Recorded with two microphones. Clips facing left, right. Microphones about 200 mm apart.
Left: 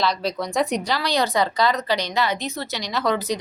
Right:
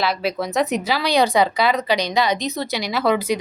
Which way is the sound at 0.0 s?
5° right (ahead or behind).